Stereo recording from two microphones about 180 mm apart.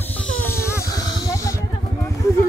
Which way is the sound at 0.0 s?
10° left (ahead or behind).